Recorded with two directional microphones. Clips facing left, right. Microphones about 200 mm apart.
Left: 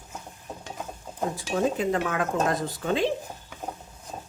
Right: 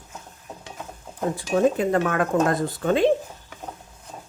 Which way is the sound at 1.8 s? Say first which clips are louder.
Right 4 dB; 55° right (ahead or behind).